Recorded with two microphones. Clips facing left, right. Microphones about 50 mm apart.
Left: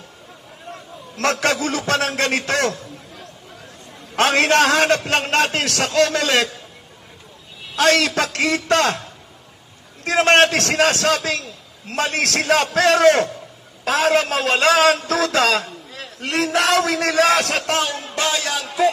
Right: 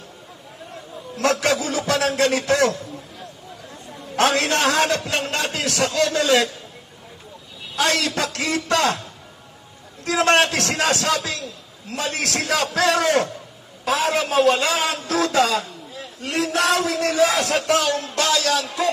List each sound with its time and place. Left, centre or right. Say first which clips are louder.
1.1 s a man's voice: even; left
4.3 s a man's voice: left 7 dB; left
7.7 s a man's voice: left 5 dB; left
10.0 s a man's voice: left 3 dB; left
13.8 s a man's voice: left 3 dB; left
15.0 s a man's voice: left 1 dB; left
17.8 s speech: right 2 dB; left